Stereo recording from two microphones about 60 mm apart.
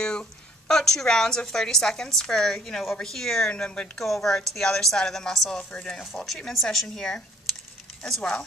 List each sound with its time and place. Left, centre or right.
0.0 s a woman's voice: centre
4.0 s a woman's voice: centre
8.2 s a woman's voice: centre